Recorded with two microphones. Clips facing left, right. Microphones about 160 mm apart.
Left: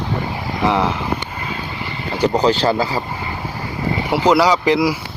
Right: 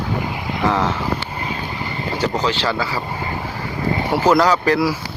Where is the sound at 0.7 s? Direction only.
15° left (ahead or behind).